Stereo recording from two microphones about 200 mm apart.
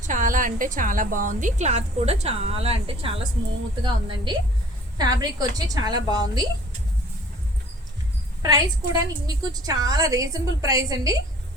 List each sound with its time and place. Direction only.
0.1 s a woman's voice: 40° right (ahead or behind); by 6.4 s 20° right (ahead or behind)
8.4 s a woman's voice: 20° right (ahead or behind)